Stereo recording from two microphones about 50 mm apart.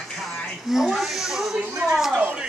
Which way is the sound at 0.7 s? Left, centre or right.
Centre.